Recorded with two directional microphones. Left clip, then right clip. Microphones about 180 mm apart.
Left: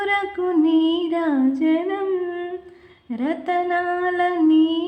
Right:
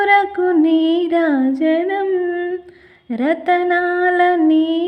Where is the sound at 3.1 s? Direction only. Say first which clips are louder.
Right 6 dB; 25° right (ahead or behind).